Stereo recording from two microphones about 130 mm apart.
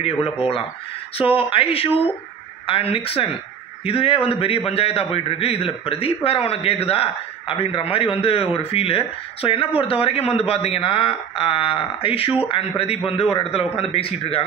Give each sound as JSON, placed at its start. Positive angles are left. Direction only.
{"t": 0.0, "sound": "a man's voice", "side_deg": 45}